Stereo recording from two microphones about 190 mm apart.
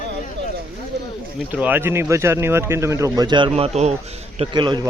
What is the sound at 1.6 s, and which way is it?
A man's voice, 10° right (ahead or behind).